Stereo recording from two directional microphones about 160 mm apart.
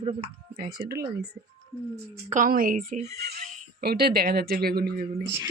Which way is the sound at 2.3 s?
60° right (ahead or behind).